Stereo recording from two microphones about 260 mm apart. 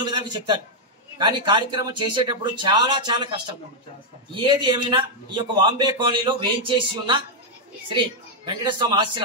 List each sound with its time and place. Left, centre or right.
0.0 s a man's voice: centre
4.4 s a man's voice: centre
8.5 s a man's voice: centre